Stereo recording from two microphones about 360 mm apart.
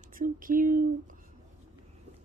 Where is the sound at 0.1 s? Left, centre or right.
Right.